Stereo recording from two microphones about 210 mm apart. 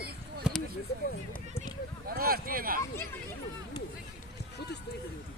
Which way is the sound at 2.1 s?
45° right (ahead or behind).